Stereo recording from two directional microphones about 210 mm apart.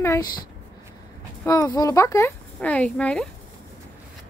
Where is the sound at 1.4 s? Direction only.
15° left (ahead or behind).